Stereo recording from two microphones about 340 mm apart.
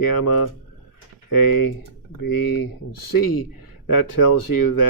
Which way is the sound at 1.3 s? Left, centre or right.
Left.